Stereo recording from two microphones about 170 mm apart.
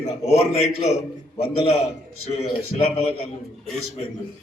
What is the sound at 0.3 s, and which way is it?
A man's voice, 35° left (ahead or behind).